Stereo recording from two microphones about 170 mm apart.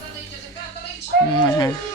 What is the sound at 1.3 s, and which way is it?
Speech, 25° left (ahead or behind).